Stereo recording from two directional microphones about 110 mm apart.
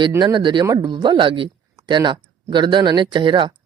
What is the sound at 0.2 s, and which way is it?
Speech, 40° right (ahead or behind).